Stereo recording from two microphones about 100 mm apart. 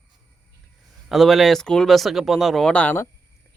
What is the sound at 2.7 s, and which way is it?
Speech, 15° left (ahead or behind).